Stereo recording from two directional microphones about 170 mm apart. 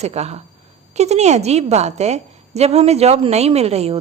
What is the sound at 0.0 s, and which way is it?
A woman's voice, 40° right (ahead or behind).